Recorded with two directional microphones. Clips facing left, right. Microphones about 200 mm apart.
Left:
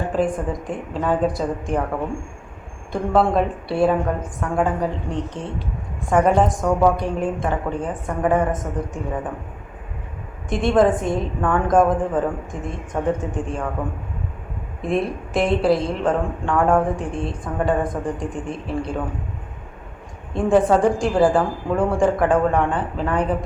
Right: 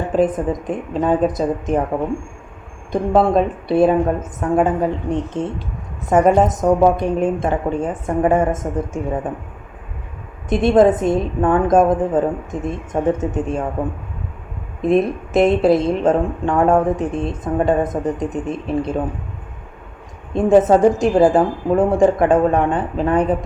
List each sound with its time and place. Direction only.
0.2 s a woman's voice: 20° right (ahead or behind)
2.9 s a woman's voice: 20° right (ahead or behind)
10.5 s a woman's voice: 20° right (ahead or behind)
14.8 s a woman's voice: 20° right (ahead or behind)
20.3 s a woman's voice: 20° right (ahead or behind)